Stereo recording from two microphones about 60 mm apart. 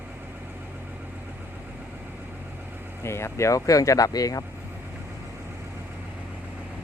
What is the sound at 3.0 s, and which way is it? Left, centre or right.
Speech, left.